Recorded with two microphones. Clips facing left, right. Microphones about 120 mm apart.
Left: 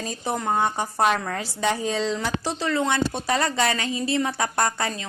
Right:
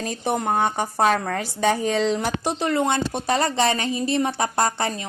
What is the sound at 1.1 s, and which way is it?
Speech, 45° right (ahead or behind).